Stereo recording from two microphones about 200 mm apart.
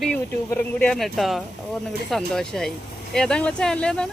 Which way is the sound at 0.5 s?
5° left (ahead or behind).